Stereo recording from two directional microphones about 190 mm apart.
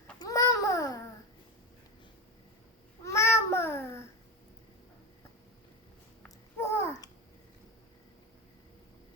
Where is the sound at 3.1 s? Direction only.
15° left (ahead or behind).